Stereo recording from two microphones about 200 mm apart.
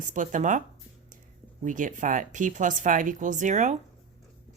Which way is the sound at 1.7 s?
40° right (ahead or behind).